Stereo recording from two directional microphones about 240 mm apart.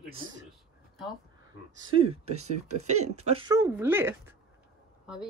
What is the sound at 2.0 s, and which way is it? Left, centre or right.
Speech, right.